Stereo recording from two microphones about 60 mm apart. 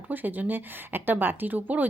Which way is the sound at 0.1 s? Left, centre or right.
Right.